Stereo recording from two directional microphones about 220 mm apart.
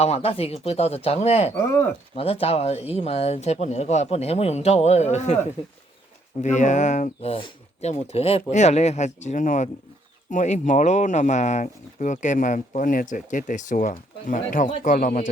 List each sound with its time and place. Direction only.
0.0 s speech: 30° left (ahead or behind)
1.5 s speech: 10° left (ahead or behind)
2.1 s speech: 25° left (ahead or behind)
6.4 s speech: 35° left (ahead or behind)
14.7 s speech: 25° left (ahead or behind)
14.9 s speech: 35° left (ahead or behind)